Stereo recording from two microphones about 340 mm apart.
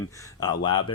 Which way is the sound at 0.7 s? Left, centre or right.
Left.